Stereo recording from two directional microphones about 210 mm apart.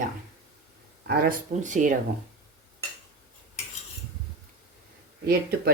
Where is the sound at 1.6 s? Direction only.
35° right (ahead or behind).